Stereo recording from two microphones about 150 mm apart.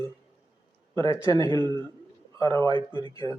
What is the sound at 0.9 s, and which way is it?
Speech, 20° left (ahead or behind).